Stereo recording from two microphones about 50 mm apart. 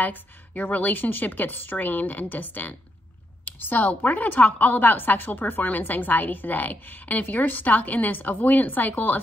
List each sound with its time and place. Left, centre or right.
0.0 s a woman's voice: left